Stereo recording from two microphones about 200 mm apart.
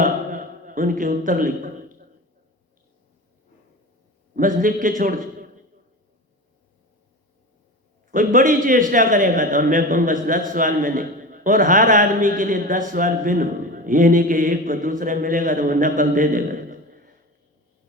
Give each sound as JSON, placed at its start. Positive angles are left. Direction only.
{"t": 0.0, "sound": "a sound", "side_deg": -40}
{"t": 4.4, "sound": "a man's voice", "side_deg": -40}
{"t": 8.1, "sound": "a man's voice", "side_deg": -40}